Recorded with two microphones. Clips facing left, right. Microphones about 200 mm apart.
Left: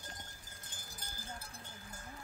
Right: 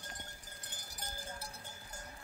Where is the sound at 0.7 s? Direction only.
75° right (ahead or behind).